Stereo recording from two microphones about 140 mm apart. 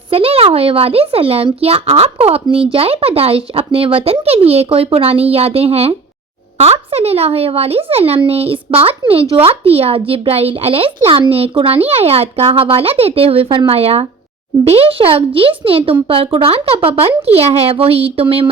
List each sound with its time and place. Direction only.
0.1 s a child's voice: 45° right (ahead or behind)